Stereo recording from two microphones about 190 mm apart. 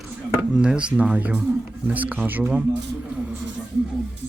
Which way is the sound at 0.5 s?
5° right (ahead or behind).